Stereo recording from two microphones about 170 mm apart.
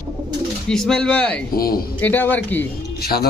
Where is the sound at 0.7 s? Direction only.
5° left (ahead or behind).